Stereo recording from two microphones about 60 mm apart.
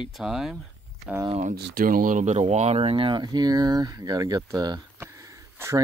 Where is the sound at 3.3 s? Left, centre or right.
Right.